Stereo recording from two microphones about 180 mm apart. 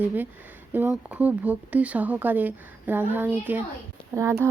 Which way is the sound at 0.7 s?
10° right (ahead or behind).